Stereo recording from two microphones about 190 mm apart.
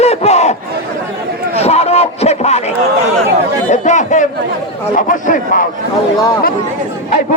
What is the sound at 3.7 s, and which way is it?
A man's voice, 40° left (ahead or behind).